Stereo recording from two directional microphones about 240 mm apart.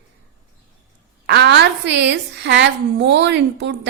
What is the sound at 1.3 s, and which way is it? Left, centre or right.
A woman's voice, right.